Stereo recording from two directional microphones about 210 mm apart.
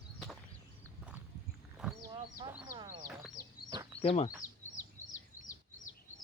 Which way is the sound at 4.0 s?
25° left (ahead or behind).